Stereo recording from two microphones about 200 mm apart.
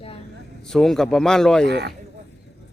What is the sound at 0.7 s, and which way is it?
Speech, centre (ahead or behind).